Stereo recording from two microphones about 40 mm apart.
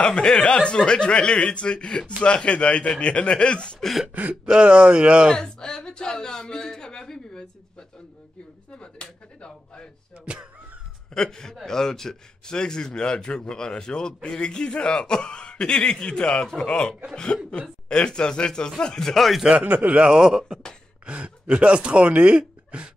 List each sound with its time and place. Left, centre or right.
0.0 s a man's voice: centre
4.1 s speech: right
4.5 s speech: right
5.3 s a man's voice: centre
8.7 s a man's voice: left
11.1 s a man's voice: centre
19.0 s speech: centre
19.6 s a man's voice: right
20.1 s speech: centre
21.0 s speech: right